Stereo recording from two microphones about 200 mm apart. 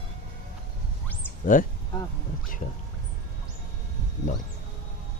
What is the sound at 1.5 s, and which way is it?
Speech, 40° left (ahead or behind).